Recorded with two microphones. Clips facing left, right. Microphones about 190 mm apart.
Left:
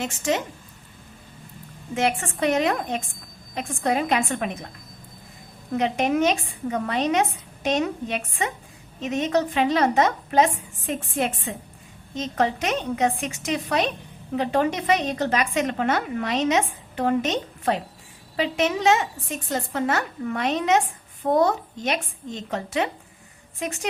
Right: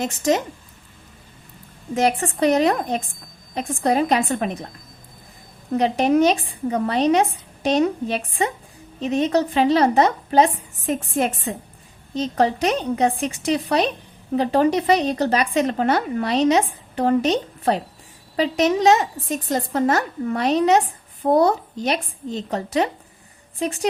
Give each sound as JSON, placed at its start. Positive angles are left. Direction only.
{"t": 0.0, "sound": "a woman's voice", "side_deg": -40}
{"t": 2.0, "sound": "a woman's voice", "side_deg": -40}
{"t": 5.7, "sound": "a woman's voice", "side_deg": -35}